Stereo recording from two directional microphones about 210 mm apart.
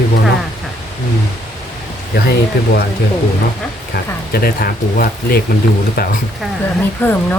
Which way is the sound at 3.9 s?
50° left (ahead or behind).